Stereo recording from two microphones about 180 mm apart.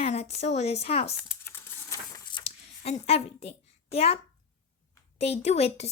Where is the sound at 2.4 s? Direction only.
35° left (ahead or behind).